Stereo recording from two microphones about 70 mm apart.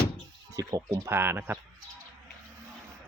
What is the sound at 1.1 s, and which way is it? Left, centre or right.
Speech, right.